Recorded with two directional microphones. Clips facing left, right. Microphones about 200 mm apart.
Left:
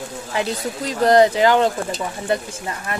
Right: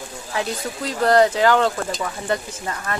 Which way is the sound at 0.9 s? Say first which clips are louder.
Left 2 dB; 20° left (ahead or behind).